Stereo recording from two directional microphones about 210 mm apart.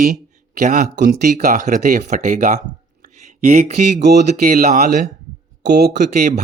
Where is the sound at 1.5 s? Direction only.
35° right (ahead or behind).